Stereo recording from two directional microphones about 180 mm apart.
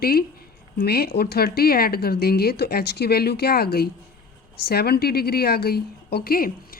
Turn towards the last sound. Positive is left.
turn(degrees=55)  # may be behind; listen again after turning